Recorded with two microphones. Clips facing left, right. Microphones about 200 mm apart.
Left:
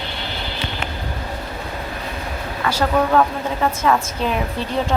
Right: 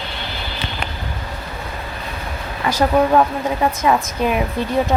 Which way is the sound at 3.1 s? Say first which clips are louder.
Right 2 dB; 15° right (ahead or behind).